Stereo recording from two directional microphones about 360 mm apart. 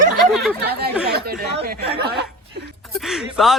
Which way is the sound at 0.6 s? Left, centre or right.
Right.